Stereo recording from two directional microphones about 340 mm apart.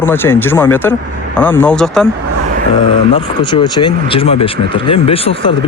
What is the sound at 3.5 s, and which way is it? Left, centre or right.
Speech, centre.